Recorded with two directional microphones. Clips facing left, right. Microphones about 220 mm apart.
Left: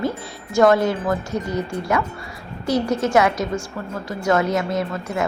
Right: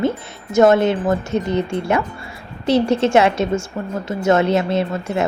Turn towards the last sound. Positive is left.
turn(degrees=-25)  # may be behind; listen again after turning